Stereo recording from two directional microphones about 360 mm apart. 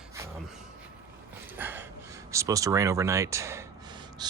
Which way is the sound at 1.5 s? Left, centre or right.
Centre.